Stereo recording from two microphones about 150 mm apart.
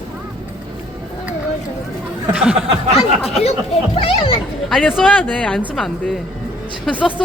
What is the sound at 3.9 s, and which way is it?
Speech, 40° left (ahead or behind).